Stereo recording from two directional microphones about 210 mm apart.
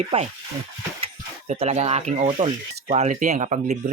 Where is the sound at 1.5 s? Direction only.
30° right (ahead or behind).